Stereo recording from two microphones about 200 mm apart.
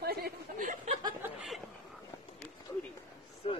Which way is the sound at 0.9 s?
20° right (ahead or behind).